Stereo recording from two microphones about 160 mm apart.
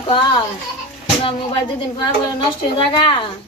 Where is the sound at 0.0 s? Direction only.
30° left (ahead or behind).